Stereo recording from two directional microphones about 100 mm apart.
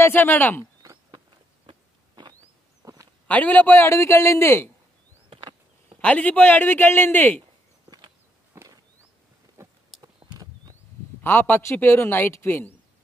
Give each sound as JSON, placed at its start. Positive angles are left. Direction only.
{"t": 0.0, "sound": "a man's voice", "side_deg": 20}
{"t": 1.7, "sound": "a sound", "side_deg": -45}
{"t": 2.8, "sound": "walk", "side_deg": -35}
{"t": 3.3, "sound": "a man's voice", "side_deg": 15}
{"t": 5.3, "sound": "a sound", "side_deg": -60}
{"t": 5.9, "sound": "speech", "side_deg": 15}
{"t": 8.5, "sound": "a sound", "side_deg": -25}
{"t": 10.0, "sound": "horse", "side_deg": -40}
{"t": 11.2, "sound": "a man's voice", "side_deg": 20}